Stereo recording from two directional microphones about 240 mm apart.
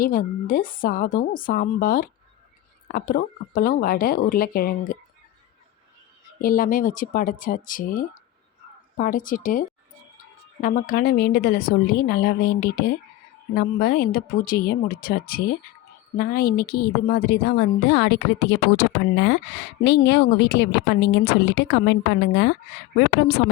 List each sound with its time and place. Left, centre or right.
0.0 s a woman's voice: left
6.4 s a woman's voice: left